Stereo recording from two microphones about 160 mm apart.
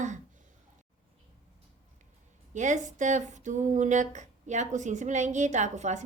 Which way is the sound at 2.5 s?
50° right (ahead or behind).